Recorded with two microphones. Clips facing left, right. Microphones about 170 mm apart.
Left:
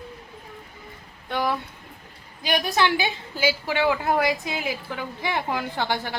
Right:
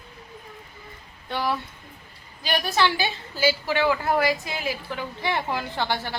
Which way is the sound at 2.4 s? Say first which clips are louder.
Left 1 dB; 15° left (ahead or behind).